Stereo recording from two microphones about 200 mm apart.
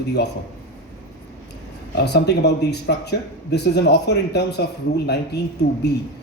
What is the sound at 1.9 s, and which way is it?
Speech, 55° left (ahead or behind).